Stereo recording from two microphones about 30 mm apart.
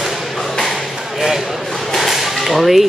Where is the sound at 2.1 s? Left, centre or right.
Centre.